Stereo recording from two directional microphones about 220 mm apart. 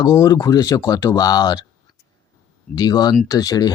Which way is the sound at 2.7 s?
20° left (ahead or behind).